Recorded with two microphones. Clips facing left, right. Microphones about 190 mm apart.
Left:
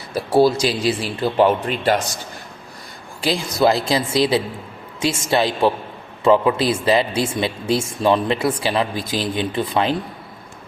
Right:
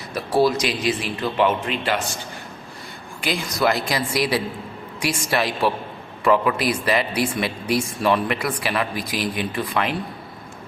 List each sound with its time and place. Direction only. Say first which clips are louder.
0.1 s a man's voice: left 4 dB; 30° left (ahead or behind)
3.2 s speech: left 5 dB; 30° left (ahead or behind)